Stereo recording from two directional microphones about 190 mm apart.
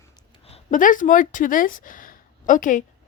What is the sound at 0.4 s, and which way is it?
A woman's voice, 35° left (ahead or behind).